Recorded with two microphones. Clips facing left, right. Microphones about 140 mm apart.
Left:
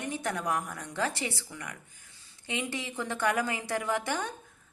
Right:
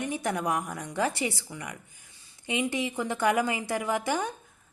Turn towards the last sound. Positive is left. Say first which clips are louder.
# right 3 dB
turn(degrees=-10)  # may be behind; listen again after turning